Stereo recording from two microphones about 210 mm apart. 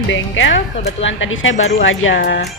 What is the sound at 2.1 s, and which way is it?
Speech, 45° left (ahead or behind).